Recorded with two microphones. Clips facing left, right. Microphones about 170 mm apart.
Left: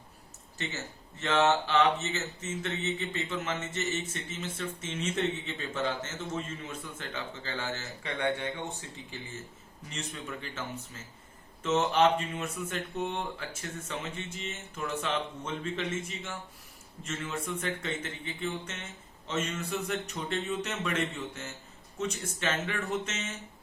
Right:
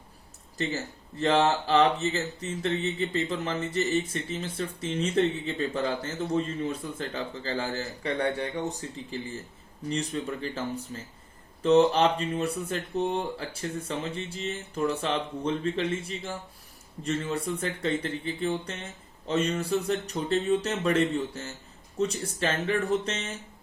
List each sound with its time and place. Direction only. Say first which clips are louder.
1.2 s speech: right 3 dB; 35° right (ahead or behind)
11.6 s speech: right 5 dB; 35° right (ahead or behind)